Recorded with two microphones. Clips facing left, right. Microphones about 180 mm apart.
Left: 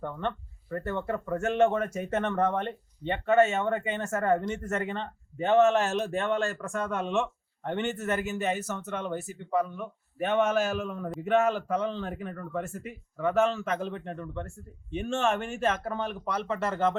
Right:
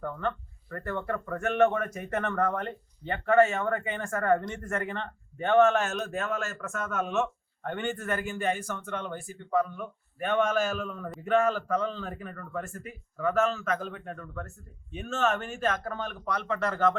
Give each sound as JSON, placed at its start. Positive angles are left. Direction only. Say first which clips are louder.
{"t": 0.0, "sound": "speech", "louder": "even", "side_deg": 25}